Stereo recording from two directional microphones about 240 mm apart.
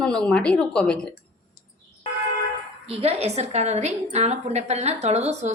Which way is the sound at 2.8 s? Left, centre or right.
Right.